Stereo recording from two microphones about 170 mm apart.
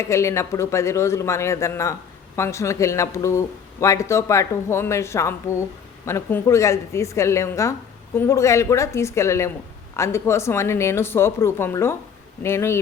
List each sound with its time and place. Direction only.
0.0 s a man's voice: 15° left (ahead or behind)